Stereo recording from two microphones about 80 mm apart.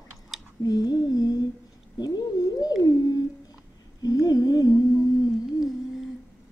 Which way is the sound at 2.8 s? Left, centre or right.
Left.